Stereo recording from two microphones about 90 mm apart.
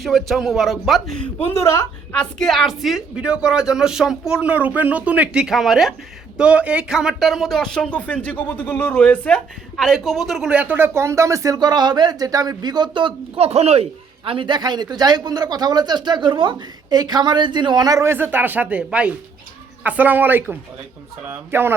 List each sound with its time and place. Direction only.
0.0 s a man's voice: centre (ahead or behind)
1.5 s a woman's voice: 35° left (ahead or behind)
2.1 s a man's voice: 5° left (ahead or behind)
9.7 s a man's voice: 5° left (ahead or behind)
10.5 s speech: 15° right (ahead or behind); by 18.1 s 40° right (ahead or behind)
18.1 s speech: 25° right (ahead or behind)